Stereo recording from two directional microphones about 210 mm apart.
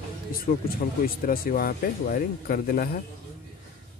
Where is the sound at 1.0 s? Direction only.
45° left (ahead or behind).